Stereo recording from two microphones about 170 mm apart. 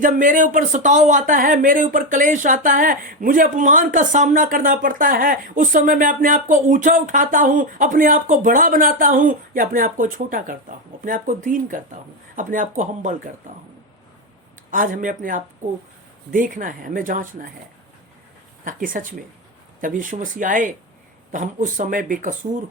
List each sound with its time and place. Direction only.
0.0 s speech: 50° right (ahead or behind)
14.7 s speech: 50° right (ahead or behind)
18.6 s speech: 55° right (ahead or behind)